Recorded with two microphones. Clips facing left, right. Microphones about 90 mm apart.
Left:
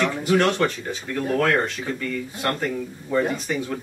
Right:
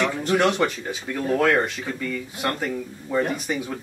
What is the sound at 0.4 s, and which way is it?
Speech, 10° right (ahead or behind).